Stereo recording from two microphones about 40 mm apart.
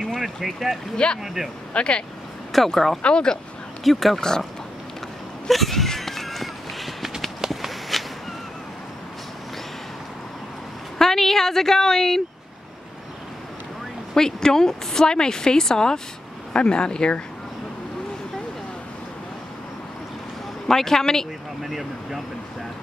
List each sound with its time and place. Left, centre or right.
0.2 s speech: centre
0.9 s speech: left
1.2 s speech: centre
1.7 s speech: left
2.5 s speech: centre
3.0 s speech: left
3.8 s speech: centre
5.5 s a sound: centre
11.0 s a woman's voice: centre
14.1 s a woman's voice: centre
20.6 s a woman's voice: centre
21.6 s speech: centre